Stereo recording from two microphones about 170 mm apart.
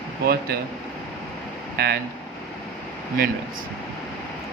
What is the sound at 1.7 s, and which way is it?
Speech, 70° right (ahead or behind).